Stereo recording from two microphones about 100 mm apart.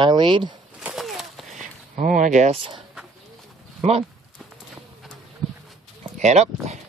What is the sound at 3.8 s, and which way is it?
Speech, 90° right.